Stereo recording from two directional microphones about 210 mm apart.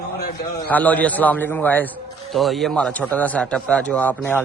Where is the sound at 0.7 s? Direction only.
5° left (ahead or behind).